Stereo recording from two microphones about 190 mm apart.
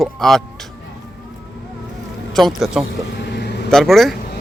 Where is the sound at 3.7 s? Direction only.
Centre (ahead or behind).